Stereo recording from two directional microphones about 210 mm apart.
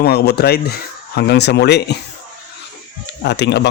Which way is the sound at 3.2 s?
55° left (ahead or behind).